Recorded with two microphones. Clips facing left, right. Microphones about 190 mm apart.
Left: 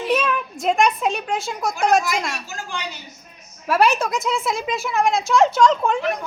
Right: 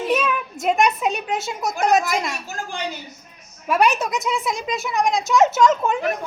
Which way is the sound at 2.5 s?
50° right (ahead or behind).